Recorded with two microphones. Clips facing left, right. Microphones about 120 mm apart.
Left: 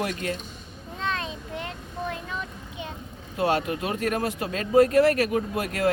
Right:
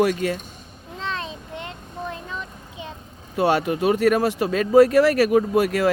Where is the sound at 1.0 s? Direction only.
30° right (ahead or behind).